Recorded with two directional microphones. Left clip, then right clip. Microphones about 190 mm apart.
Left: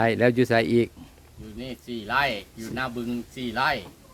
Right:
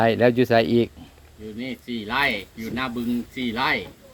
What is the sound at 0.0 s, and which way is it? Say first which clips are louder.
Speech: right 3 dB; 20° left (ahead or behind).